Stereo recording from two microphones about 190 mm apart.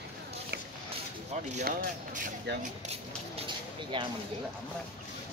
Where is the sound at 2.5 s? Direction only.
60° right (ahead or behind).